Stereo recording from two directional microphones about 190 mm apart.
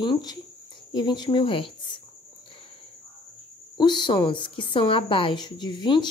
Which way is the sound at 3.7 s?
25° left (ahead or behind).